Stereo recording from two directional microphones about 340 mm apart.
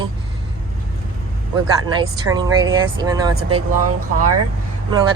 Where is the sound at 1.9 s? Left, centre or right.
Centre.